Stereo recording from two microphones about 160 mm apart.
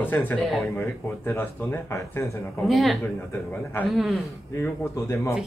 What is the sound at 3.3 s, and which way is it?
Speech, 10° left (ahead or behind).